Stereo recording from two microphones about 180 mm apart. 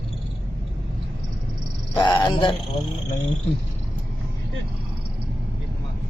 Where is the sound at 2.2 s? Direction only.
25° left (ahead or behind).